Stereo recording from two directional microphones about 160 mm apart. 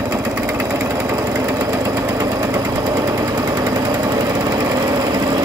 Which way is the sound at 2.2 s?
20° right (ahead or behind).